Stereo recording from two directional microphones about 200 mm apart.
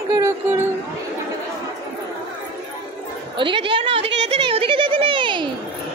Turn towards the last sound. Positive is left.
turn(degrees=-25)  # may be behind; listen again after turning